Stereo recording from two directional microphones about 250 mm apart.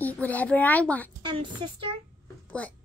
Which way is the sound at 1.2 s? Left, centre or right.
Centre.